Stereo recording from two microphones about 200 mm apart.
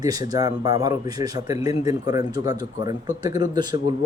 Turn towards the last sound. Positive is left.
turn(degrees=-20)  # may be behind; listen again after turning